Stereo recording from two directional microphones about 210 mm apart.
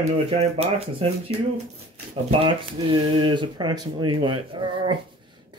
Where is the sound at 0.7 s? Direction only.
25° right (ahead or behind).